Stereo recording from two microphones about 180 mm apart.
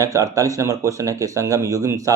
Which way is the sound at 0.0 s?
20° right (ahead or behind).